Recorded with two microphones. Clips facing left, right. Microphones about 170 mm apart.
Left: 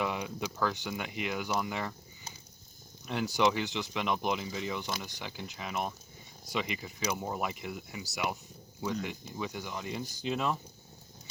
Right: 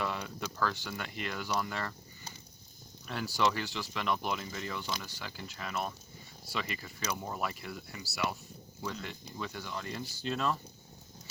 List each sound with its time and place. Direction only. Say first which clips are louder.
0.0 s speech: left 3 dB; 15° left (ahead or behind)
3.1 s speech: left 3 dB; 20° left (ahead or behind)